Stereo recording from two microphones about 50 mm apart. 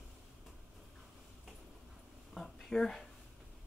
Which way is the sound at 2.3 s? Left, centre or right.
Centre.